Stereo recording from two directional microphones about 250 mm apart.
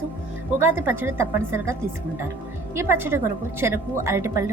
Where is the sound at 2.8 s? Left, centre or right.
Centre.